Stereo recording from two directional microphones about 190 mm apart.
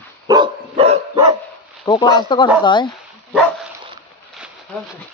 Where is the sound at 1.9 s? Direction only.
25° left (ahead or behind).